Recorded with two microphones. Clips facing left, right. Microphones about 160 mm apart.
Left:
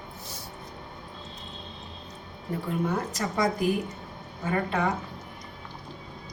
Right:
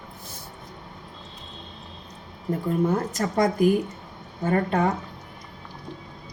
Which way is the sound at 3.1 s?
50° right (ahead or behind).